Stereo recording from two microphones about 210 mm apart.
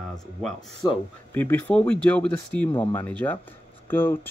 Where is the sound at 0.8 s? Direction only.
15° left (ahead or behind).